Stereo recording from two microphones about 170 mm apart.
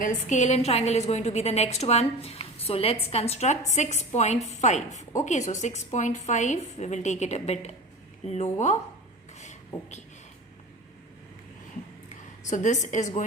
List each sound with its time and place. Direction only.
0.0 s a woman's voice: 45° left (ahead or behind)
9.4 s beatboxing: 45° left (ahead or behind)
12.0 s a woman's voice: 45° left (ahead or behind)